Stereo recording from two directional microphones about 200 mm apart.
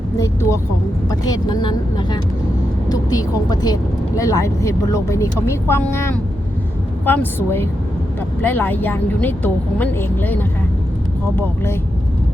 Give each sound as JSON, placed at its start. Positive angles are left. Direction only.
{"t": 1.3, "sound": "a woman's voice", "side_deg": 20}